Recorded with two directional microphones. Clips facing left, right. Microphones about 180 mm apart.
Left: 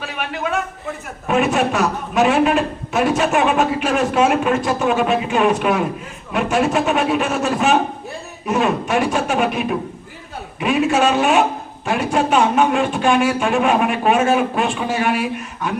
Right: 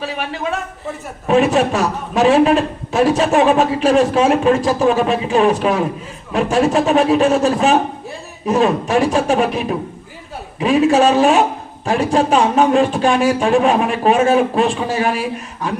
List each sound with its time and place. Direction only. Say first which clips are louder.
1.3 s a man's voice: right 4 dB; 30° right (ahead or behind)